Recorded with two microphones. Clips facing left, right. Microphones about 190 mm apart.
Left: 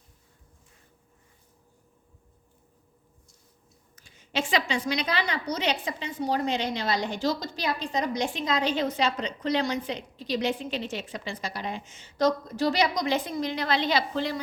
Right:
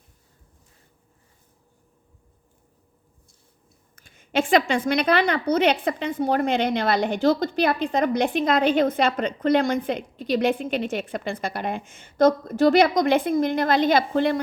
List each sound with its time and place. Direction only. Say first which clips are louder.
3.9 s a woman's voice: right 7 dB; 55° right (ahead or behind)